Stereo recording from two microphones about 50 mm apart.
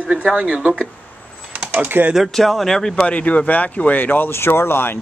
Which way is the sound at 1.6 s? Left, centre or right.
Right.